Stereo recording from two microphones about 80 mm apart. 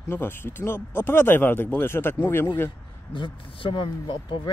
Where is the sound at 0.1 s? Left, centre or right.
Left.